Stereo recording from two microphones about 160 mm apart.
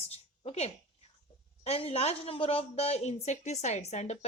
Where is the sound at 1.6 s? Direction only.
40° left (ahead or behind).